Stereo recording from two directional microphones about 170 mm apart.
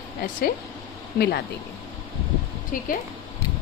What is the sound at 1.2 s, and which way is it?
Speech, 70° left (ahead or behind).